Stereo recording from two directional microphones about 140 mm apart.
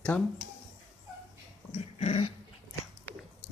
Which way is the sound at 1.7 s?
50° left (ahead or behind).